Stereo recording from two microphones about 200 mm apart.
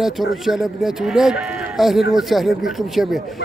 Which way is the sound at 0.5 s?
Centre (ahead or behind).